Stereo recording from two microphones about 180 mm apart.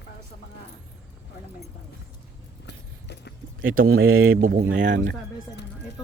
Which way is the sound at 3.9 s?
90° right.